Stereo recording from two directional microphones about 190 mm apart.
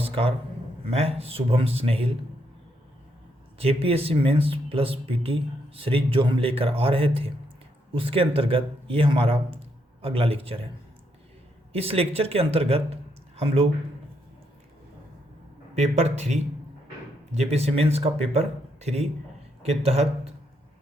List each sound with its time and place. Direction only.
0.0 s a sound: 30° right (ahead or behind)
0.9 s speech: 35° right (ahead or behind)
3.6 s speech: 30° right (ahead or behind)
11.7 s speech: 30° right (ahead or behind)
15.8 s speech: 35° right (ahead or behind)